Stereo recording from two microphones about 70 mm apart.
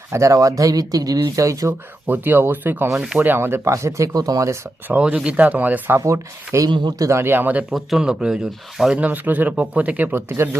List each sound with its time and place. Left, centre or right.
0.1 s speech: right
2.0 s speech: right
2.9 s speech: centre
3.2 s speech: right
3.7 s speech: right
4.9 s speech: centre
6.1 s speech: right
7.7 s speech: centre
9.0 s speech: right